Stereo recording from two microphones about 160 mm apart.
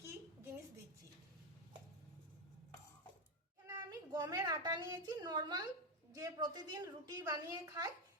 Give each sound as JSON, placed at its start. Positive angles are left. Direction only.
{"t": 3.7, "sound": "a woman's voice", "side_deg": -25}